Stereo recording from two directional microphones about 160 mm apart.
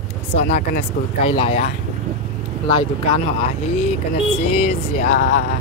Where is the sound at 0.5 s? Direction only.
70° left (ahead or behind).